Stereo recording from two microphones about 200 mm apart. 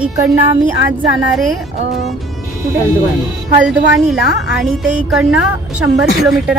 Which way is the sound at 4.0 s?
Centre (ahead or behind).